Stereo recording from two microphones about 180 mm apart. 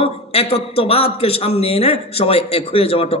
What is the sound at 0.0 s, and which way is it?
A man's voice, 35° left (ahead or behind).